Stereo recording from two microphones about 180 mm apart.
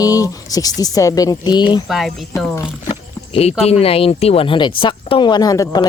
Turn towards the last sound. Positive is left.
turn(degrees=20)  # may be behind; listen again after turning